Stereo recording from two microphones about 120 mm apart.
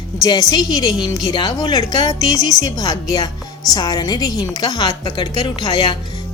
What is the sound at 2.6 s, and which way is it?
A woman's voice, 30° left (ahead or behind).